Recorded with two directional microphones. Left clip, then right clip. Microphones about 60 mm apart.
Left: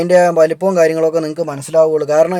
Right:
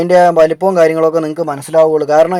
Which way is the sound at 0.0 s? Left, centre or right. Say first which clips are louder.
Right 2 dB; left.